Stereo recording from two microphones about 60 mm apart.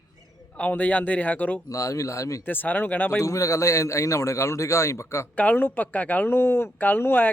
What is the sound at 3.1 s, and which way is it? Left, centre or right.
A man's voice, left.